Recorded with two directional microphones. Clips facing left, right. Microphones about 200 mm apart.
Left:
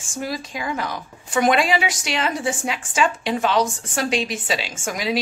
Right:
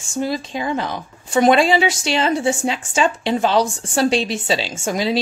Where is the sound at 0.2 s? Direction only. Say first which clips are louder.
Right 5 dB; 25° right (ahead or behind).